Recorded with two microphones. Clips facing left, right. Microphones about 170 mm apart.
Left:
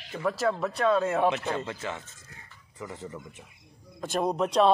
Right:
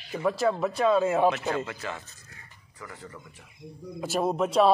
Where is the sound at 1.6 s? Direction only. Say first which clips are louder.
Left 1 dB; 20° left (ahead or behind).